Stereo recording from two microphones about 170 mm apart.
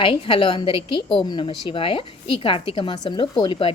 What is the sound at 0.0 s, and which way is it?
A woman's voice, 30° left (ahead or behind).